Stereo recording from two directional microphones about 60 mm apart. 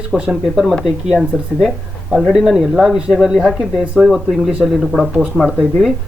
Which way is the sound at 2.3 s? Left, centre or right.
Centre.